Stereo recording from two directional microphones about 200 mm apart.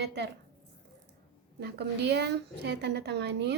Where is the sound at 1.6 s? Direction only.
55° right (ahead or behind).